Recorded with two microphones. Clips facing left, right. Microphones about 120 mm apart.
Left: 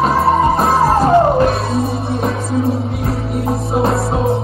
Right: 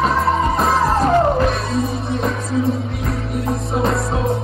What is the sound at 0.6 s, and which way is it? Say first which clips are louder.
Music: left 3 dB; 30° left (ahead or behind).